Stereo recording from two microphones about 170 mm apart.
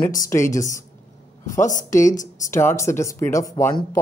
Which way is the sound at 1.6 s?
50° left (ahead or behind).